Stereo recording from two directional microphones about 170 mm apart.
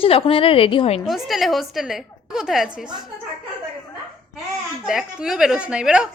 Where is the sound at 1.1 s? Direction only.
Centre (ahead or behind).